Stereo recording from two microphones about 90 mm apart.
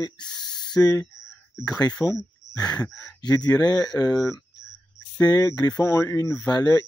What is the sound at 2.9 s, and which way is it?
Speech, 40° left (ahead or behind).